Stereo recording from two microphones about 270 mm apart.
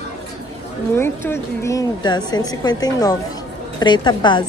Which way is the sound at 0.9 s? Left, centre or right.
Centre.